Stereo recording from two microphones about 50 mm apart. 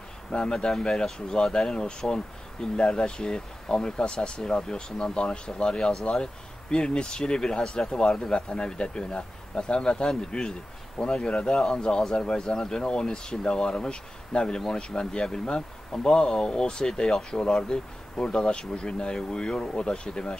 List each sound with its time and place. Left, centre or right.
0.3 s speech: centre